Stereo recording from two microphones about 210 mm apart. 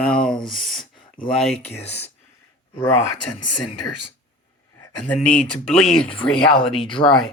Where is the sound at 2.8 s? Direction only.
15° left (ahead or behind).